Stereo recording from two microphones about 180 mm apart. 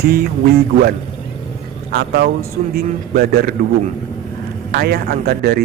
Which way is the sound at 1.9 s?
60° right (ahead or behind).